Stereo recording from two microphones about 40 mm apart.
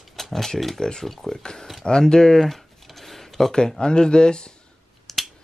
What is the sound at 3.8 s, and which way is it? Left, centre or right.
Speech, left.